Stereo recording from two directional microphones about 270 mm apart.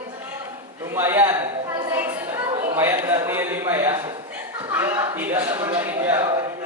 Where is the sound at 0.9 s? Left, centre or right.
Centre.